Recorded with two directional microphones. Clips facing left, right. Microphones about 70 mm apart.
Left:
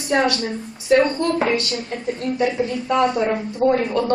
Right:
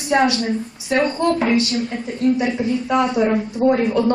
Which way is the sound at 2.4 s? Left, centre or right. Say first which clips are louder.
Right 1 dB; centre.